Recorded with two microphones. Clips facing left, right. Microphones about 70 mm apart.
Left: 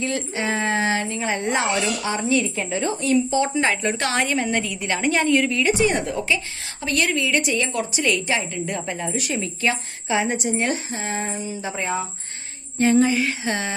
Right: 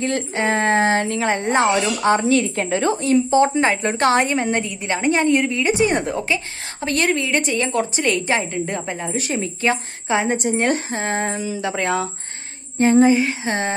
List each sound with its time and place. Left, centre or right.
0.0 s speech: right
1.0 s speech: right
1.4 s a woman's voice: right
2.0 s a woman's voice: right
10.3 s speech: right
11.3 s a sound: right
12.8 s a woman's voice: right